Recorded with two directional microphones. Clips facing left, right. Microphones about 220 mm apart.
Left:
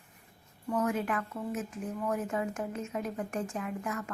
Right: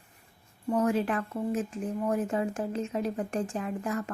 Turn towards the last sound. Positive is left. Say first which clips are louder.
# right 4 dB
turn(degrees=-30)  # may be behind; listen again after turning